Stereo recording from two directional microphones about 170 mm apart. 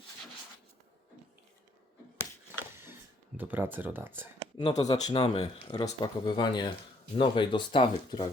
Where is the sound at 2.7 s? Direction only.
15° right (ahead or behind).